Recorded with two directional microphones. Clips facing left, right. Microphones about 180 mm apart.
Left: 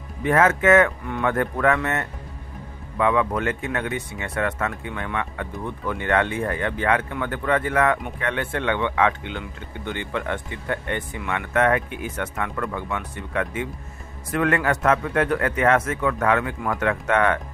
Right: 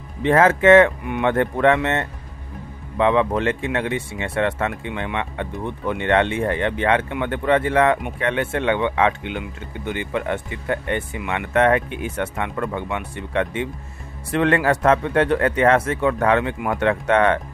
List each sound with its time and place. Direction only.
0.2 s speech: 30° right (ahead or behind)